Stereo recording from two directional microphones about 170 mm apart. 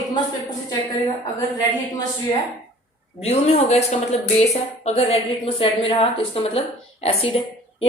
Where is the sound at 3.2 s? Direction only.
40° left (ahead or behind).